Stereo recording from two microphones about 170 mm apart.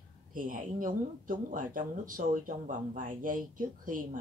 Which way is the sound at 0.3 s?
55° right (ahead or behind).